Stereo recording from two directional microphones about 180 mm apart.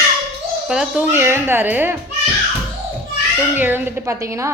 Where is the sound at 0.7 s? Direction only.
5° right (ahead or behind).